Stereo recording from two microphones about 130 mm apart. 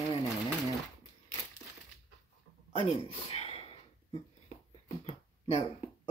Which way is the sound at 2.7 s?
45° left (ahead or behind).